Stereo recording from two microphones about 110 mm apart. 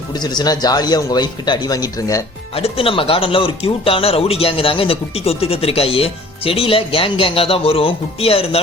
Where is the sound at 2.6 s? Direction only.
60° left (ahead or behind).